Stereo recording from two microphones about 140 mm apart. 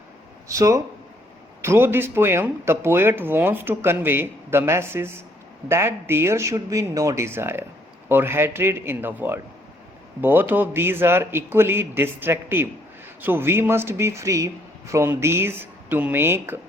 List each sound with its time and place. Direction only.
0.4 s speech: 20° right (ahead or behind)